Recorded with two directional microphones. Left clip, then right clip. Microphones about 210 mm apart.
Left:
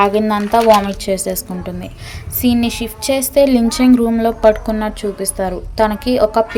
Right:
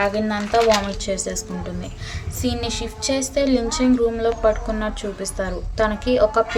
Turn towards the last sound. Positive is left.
turn(degrees=25)  # may be behind; listen again after turning